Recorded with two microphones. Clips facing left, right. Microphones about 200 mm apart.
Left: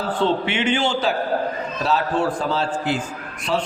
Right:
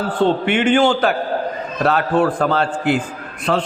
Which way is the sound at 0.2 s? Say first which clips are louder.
Right 6 dB; 50° right (ahead or behind).